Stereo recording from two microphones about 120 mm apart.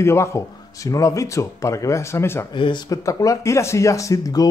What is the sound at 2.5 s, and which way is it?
Speech, 40° left (ahead or behind).